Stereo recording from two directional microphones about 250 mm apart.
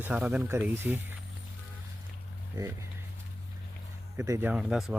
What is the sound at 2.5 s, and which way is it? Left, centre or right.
Speech, centre.